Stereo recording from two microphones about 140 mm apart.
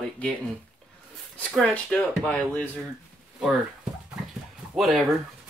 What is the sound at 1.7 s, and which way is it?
Speech, 10° left (ahead or behind).